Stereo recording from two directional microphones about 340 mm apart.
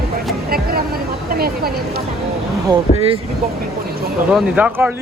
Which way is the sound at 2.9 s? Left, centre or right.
Centre.